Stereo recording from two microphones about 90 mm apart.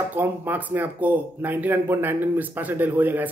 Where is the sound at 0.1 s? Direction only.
20° right (ahead or behind).